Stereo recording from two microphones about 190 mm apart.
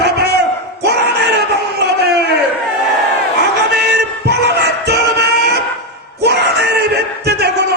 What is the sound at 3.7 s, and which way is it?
Music, 60° right (ahead or behind).